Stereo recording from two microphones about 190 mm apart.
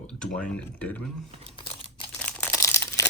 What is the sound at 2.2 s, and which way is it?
Crumpling, 5° left (ahead or behind).